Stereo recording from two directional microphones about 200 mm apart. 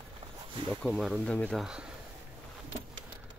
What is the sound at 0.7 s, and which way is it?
Speech, centre (ahead or behind).